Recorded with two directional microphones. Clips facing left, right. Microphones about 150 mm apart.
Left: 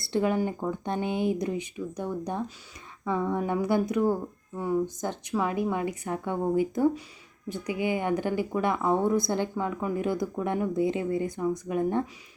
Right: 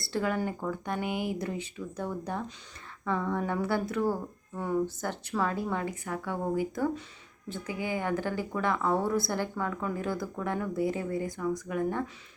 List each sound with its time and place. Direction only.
0.0 s speech: 20° left (ahead or behind)